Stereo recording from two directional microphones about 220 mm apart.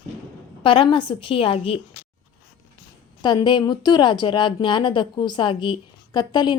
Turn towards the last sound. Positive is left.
turn(degrees=20)  # may be behind; listen again after turning